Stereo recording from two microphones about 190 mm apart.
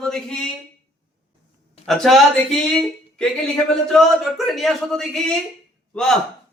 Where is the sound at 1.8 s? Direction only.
Centre (ahead or behind).